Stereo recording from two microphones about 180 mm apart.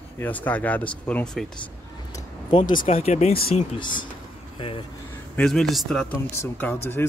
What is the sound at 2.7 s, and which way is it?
Speech, 50° left (ahead or behind).